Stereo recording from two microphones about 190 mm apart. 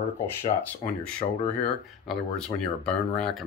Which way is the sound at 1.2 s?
25° left (ahead or behind).